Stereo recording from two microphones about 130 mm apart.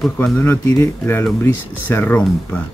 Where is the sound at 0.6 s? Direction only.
30° left (ahead or behind).